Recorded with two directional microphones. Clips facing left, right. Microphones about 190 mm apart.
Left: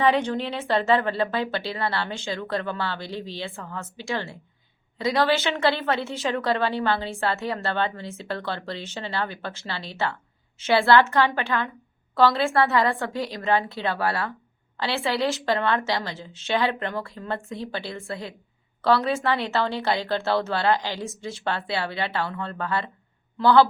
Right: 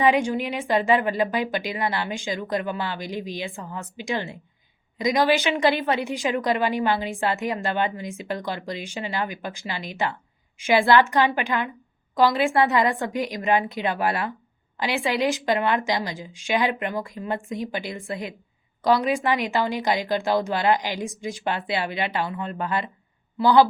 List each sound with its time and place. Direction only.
0.0 s a woman's voice: 10° right (ahead or behind)